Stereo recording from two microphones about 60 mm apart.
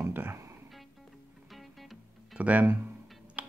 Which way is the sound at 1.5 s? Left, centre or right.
Centre.